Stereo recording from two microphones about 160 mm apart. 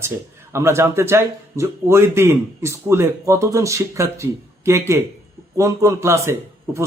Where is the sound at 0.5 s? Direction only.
15° right (ahead or behind).